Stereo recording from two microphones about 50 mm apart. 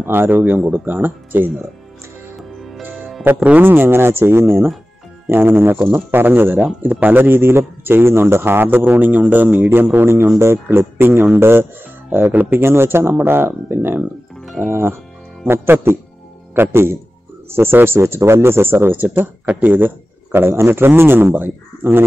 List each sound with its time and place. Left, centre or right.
0.0 s a man's voice: right
2.8 s music: right
3.3 s speech: right
3.6 s a man's voice: right
9.9 s a man's voice: right
12.1 s a man's voice: right